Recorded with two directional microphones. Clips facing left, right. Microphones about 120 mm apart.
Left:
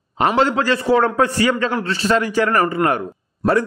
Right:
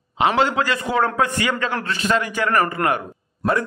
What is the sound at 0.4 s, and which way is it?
A man's voice, 40° left (ahead or behind).